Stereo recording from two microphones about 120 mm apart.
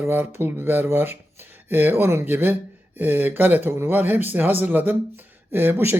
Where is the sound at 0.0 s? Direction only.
20° right (ahead or behind).